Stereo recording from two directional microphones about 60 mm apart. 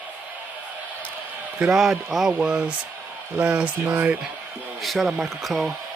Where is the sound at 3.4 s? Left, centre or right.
Centre.